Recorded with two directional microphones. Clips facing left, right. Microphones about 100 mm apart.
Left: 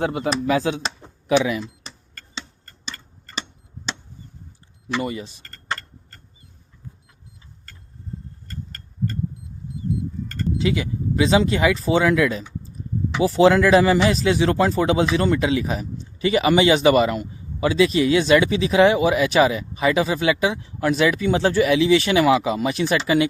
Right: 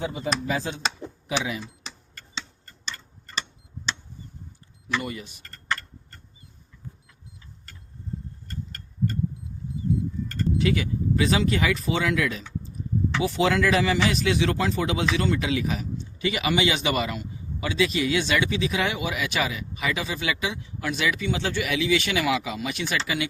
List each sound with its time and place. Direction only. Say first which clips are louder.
0.0 s speech: left 6 dB; 65° left (ahead or behind)
4.9 s speech: left 4 dB; 25° left (ahead or behind)
10.6 s a man's voice: left 2 dB; 25° left (ahead or behind)